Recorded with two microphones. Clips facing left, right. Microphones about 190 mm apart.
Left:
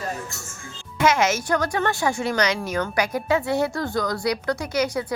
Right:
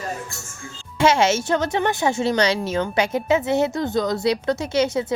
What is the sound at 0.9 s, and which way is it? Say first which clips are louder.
A woman's voice: right 3 dB; 30° right (ahead or behind).